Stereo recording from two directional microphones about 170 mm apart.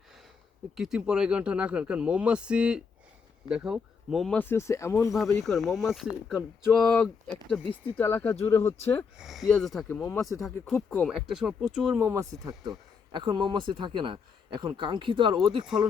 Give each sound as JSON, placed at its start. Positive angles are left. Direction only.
{"t": 0.8, "sound": "speech", "side_deg": -5}
{"t": 5.4, "sound": "speech", "side_deg": 0}
{"t": 9.1, "sound": "speech", "side_deg": 0}
{"t": 12.0, "sound": "a man's voice", "side_deg": -15}
{"t": 15.6, "sound": "speech", "side_deg": -5}